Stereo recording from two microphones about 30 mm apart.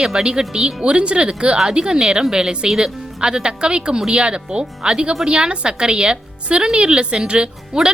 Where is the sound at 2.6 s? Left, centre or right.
Centre.